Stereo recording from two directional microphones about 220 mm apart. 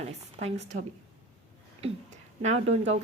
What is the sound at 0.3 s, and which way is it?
A woman's voice, 30° right (ahead or behind).